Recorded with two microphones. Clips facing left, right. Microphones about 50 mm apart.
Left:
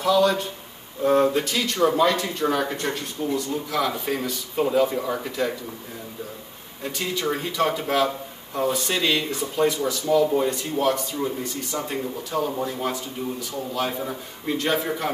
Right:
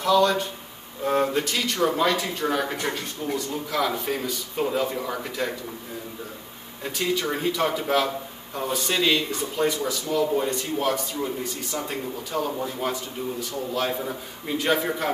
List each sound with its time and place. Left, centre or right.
0.0 s speech: centre
6.8 s speech: centre